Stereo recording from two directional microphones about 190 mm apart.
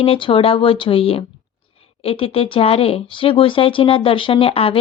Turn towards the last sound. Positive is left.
turn(degrees=30)  # may be behind; listen again after turning